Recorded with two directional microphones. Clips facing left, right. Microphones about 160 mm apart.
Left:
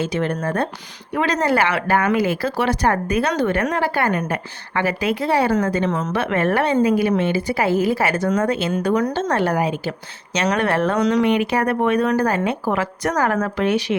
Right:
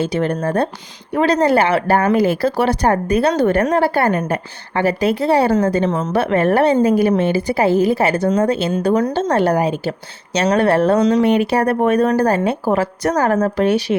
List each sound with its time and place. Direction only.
0.0 s speech: 35° right (ahead or behind)